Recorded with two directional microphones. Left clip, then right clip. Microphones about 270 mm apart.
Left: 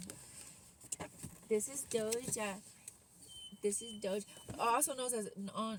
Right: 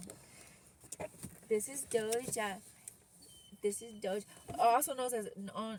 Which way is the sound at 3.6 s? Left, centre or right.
Centre.